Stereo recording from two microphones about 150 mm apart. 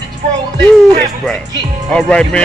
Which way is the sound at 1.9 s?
5° left (ahead or behind).